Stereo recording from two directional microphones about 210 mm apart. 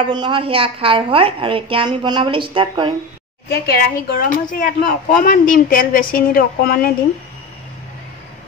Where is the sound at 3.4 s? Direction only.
50° left (ahead or behind).